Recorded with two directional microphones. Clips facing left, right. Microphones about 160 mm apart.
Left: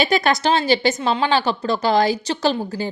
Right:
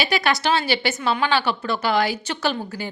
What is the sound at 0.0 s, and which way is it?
A woman's voice, 45° left (ahead or behind).